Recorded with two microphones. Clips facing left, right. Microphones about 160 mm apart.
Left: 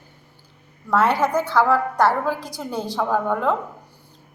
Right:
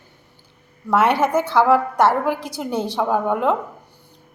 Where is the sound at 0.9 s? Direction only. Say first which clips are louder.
Right 2 dB; 20° right (ahead or behind).